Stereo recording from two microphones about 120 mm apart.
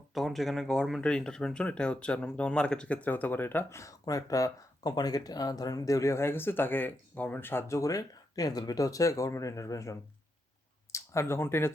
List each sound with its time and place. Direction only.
0.1 s speech: centre (ahead or behind); by 11.7 s 20° left (ahead or behind)